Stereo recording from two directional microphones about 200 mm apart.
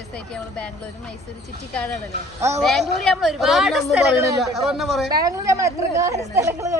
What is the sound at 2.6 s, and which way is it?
Speech, centre (ahead or behind).